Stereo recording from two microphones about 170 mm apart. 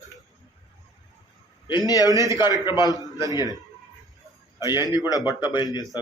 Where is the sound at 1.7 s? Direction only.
20° left (ahead or behind).